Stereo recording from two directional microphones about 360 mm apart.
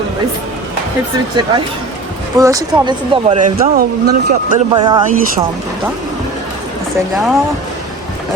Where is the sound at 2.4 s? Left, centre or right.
Centre; by 4.6 s right.